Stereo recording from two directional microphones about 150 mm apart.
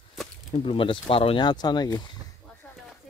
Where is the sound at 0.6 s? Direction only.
35° left (ahead or behind).